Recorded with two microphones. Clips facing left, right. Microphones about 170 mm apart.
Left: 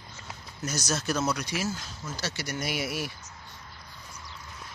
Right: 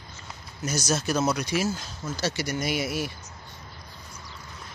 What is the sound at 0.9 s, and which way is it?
Speech, 20° right (ahead or behind).